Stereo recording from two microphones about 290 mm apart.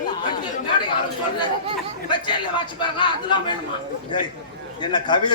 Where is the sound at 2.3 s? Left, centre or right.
Centre.